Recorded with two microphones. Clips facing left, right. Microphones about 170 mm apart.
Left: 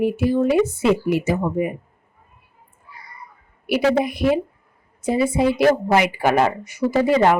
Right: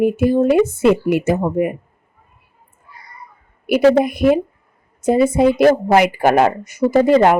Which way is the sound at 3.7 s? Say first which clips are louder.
Right 6 dB; 50° right (ahead or behind).